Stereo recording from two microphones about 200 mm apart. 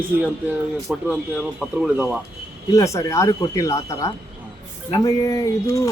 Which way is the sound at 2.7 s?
15° left (ahead or behind).